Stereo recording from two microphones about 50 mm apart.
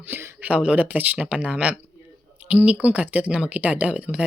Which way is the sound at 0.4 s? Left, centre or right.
Right.